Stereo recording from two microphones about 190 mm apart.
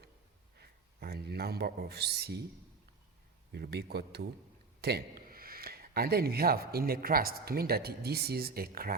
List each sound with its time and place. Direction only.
0.6 s speech: 55° right (ahead or behind)
3.5 s speech: 60° right (ahead or behind)